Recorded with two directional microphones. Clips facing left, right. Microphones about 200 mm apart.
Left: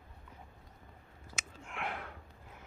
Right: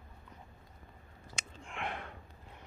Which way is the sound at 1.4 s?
5° left (ahead or behind).